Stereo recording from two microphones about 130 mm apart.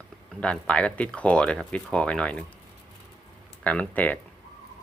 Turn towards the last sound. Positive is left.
turn(degrees=10)  # may be behind; listen again after turning